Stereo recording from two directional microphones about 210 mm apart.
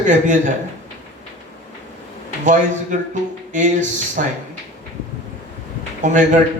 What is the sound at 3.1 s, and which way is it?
Speech, 35° right (ahead or behind).